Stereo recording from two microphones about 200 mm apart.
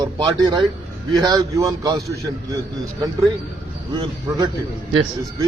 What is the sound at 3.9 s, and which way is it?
Speech, 25° right (ahead or behind).